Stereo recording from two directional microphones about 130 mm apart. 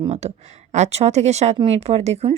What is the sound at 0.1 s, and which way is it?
Speech, 55° right (ahead or behind).